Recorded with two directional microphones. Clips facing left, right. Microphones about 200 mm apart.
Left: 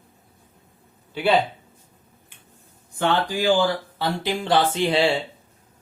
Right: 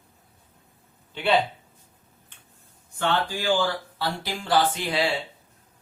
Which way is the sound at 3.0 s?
15° left (ahead or behind).